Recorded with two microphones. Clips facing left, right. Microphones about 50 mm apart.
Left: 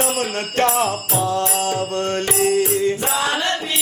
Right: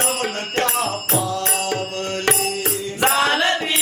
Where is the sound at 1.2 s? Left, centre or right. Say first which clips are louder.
Left 6 dB; left.